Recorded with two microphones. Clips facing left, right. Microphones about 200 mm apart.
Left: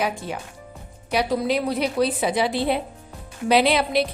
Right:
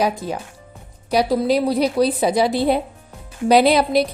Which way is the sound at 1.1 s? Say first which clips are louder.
Right 5 dB; 35° right (ahead or behind).